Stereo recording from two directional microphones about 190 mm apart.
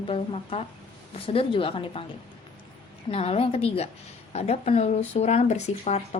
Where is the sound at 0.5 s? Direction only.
30° left (ahead or behind).